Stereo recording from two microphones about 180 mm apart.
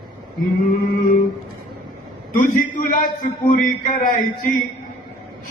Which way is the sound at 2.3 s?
45° left (ahead or behind).